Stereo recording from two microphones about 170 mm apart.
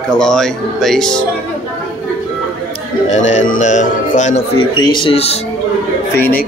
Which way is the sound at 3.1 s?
45° left (ahead or behind).